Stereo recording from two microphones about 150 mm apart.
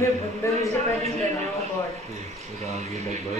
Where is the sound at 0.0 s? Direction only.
20° left (ahead or behind).